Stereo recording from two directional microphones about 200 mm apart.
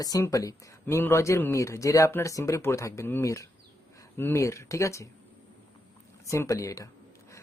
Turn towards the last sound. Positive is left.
turn(degrees=15)  # may be behind; listen again after turning